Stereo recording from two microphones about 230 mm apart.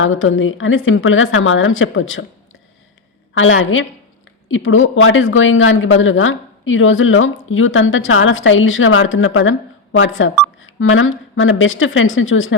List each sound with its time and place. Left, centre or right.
0.0 s a woman's voice: left
3.3 s a woman's voice: left